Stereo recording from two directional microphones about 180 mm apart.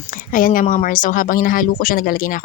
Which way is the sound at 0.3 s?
50° left (ahead or behind).